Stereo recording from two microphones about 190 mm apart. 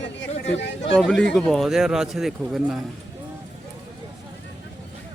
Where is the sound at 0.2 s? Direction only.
70° left (ahead or behind).